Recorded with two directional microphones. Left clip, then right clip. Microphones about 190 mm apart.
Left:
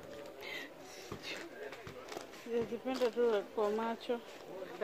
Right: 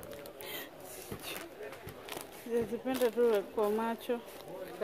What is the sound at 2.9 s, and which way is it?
Speech, 20° right (ahead or behind).